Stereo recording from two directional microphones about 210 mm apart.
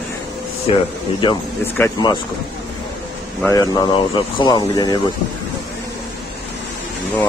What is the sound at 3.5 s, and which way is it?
Speech, 20° left (ahead or behind).